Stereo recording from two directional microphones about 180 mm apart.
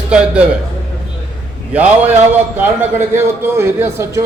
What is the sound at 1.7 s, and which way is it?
Speech, 10° right (ahead or behind).